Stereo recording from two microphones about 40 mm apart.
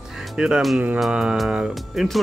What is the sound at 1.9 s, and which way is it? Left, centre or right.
Speech, centre.